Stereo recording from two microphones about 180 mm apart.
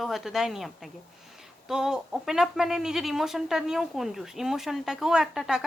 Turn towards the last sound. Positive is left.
turn(degrees=0)  # may be behind; listen again after turning